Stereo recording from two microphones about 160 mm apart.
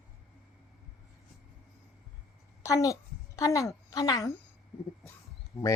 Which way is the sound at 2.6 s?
20° left (ahead or behind).